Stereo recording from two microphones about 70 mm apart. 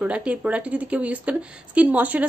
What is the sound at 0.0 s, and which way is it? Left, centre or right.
A woman's voice, centre.